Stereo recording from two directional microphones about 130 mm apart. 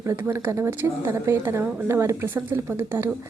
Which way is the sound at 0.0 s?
20° right (ahead or behind).